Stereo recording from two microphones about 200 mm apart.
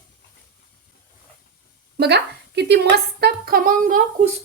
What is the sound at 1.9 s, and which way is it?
A woman's voice, 55° right (ahead or behind).